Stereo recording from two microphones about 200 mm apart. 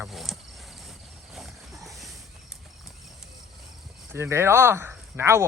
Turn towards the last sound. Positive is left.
turn(degrees=-10)  # may be behind; listen again after turning